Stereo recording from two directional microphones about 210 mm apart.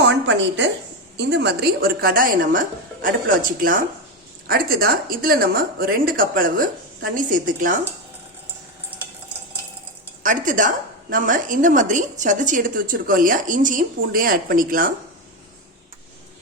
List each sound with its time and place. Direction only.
0.0 s a sound: 55° right (ahead or behind)
1.1 s a woman's voice: 55° right (ahead or behind)
8.9 s stir: 10° right (ahead or behind)
10.2 s a woman's voice: 40° right (ahead or behind)